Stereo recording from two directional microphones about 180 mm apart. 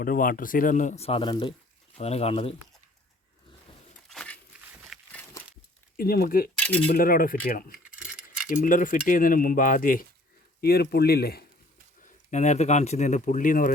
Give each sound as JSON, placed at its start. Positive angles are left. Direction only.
{"t": 0.0, "sound": "speech", "side_deg": 50}
{"t": 4.1, "sound": "a sound", "side_deg": 5}
{"t": 6.0, "sound": "speech", "side_deg": 55}
{"t": 6.6, "sound": "cutlery", "side_deg": 10}
{"t": 6.8, "sound": "speech", "side_deg": 55}
{"t": 7.9, "sound": "keys jangling", "side_deg": -5}
{"t": 8.6, "sound": "speech", "side_deg": 50}
{"t": 10.6, "sound": "speech", "side_deg": 60}
{"t": 12.0, "sound": "speech", "side_deg": 40}